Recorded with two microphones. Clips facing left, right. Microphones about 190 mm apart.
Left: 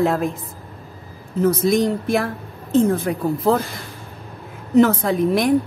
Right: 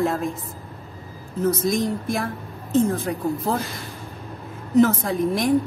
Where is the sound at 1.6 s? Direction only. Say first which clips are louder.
Left 5 dB; 70° left (ahead or behind).